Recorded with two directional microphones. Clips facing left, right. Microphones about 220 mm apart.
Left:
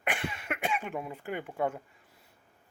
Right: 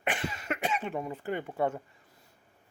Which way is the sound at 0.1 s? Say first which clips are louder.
Right 1 dB; 5° left (ahead or behind).